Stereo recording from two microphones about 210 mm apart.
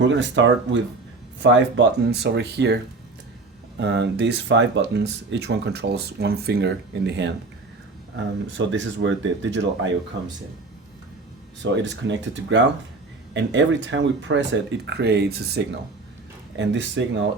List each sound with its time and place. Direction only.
0.0 s speech: 60° right (ahead or behind)
3.8 s speech: 55° right (ahead or behind)
8.5 s speech: 60° right (ahead or behind)
11.6 s speech: 60° right (ahead or behind)